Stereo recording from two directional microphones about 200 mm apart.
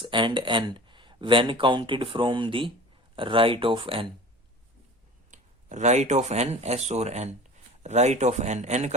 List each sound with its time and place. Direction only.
0.0 s speech: 25° right (ahead or behind)
5.3 s speech: 35° right (ahead or behind)